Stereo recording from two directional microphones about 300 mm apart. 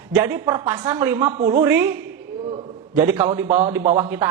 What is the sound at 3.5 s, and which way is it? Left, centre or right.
Speech, right.